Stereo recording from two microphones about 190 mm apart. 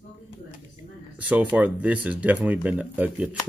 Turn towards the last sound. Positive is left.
turn(degrees=-5)  # may be behind; listen again after turning